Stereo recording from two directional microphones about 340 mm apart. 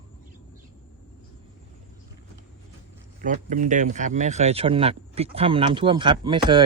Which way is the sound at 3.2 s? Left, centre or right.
Right.